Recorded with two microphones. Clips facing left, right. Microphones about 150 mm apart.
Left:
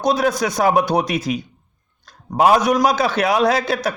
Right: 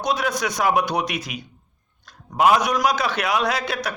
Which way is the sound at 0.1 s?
30° left (ahead or behind).